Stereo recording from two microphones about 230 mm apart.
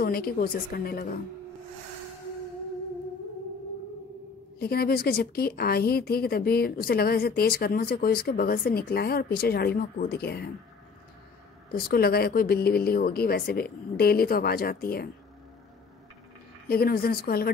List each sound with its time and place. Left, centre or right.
0.0 s speech: left
4.6 s speech: left
11.7 s speech: left
16.6 s speech: left